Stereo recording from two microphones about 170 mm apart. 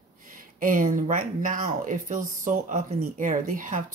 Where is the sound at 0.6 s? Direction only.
55° right (ahead or behind).